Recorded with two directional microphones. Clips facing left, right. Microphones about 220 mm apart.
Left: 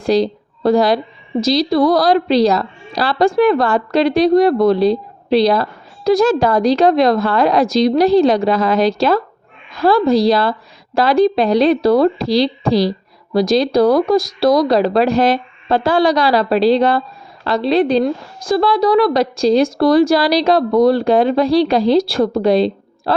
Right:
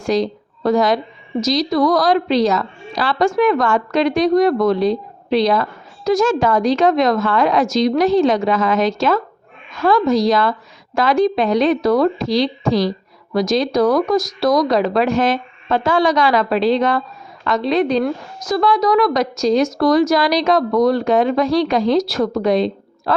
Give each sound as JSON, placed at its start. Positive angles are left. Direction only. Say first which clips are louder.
{"t": 0.0, "sound": "speech", "louder": "left 3 dB", "side_deg": 35}